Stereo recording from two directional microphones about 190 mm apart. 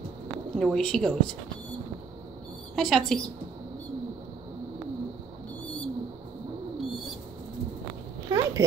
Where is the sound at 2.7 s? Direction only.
Centre (ahead or behind).